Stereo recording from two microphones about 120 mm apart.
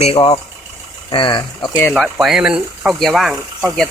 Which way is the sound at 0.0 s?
50° left (ahead or behind).